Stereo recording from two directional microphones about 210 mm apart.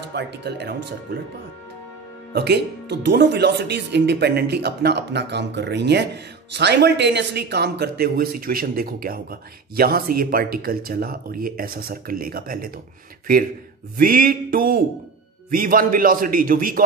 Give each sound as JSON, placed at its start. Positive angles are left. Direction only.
{"t": 0.1, "sound": "speech", "side_deg": -55}
{"t": 2.3, "sound": "a man's voice", "side_deg": -50}